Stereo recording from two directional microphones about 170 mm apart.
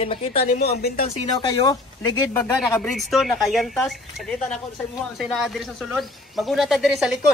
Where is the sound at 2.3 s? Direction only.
15° left (ahead or behind).